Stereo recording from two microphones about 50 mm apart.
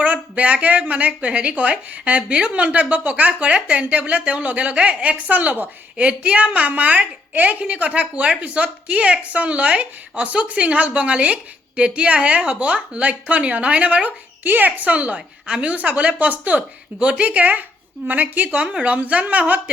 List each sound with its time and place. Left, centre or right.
0.0 s speech: right
18.4 s speech: right